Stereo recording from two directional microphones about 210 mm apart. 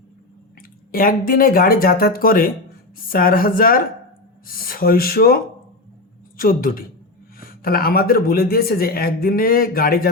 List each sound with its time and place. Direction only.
0.9 s speech: 45° left (ahead or behind)